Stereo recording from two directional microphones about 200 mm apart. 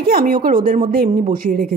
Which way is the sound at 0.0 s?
50° right (ahead or behind).